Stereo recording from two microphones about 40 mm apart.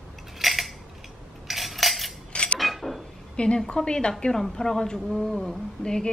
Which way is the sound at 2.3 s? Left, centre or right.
Left.